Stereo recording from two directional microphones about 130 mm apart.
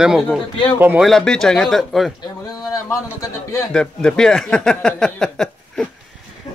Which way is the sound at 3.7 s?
5° left (ahead or behind).